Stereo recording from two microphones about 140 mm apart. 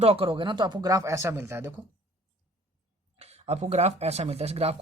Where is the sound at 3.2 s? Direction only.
50° right (ahead or behind).